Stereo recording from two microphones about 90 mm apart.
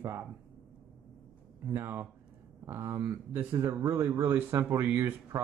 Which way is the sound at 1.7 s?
25° right (ahead or behind).